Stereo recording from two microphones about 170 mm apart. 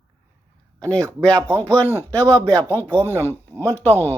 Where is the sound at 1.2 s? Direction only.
10° left (ahead or behind).